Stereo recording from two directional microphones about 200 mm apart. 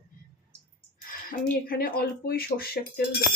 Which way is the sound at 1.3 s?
50° left (ahead or behind).